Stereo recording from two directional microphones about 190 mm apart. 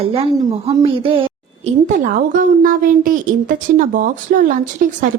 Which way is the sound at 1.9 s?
45° right (ahead or behind).